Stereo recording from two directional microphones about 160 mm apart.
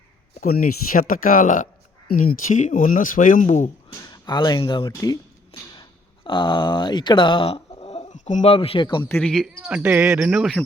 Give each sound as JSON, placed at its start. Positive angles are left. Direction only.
{"t": 0.3, "sound": "speech", "side_deg": 65}
{"t": 4.1, "sound": "speech", "side_deg": 25}
{"t": 4.9, "sound": "speech", "side_deg": 20}
{"t": 6.2, "sound": "speech", "side_deg": 30}
{"t": 8.5, "sound": "speech", "side_deg": 35}
{"t": 9.0, "sound": "speech", "side_deg": 10}